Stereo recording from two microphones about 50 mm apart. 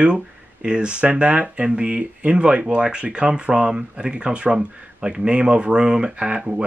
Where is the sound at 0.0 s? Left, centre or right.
Centre.